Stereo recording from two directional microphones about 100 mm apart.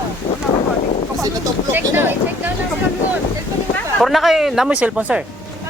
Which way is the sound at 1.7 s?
20° right (ahead or behind).